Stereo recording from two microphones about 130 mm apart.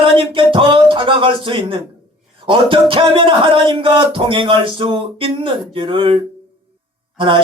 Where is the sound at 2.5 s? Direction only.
40° right (ahead or behind).